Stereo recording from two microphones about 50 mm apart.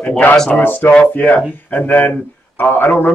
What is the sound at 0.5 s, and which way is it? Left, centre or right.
A man's voice, left.